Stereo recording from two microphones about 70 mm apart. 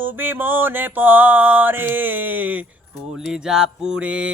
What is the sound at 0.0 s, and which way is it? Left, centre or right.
Mantra, right.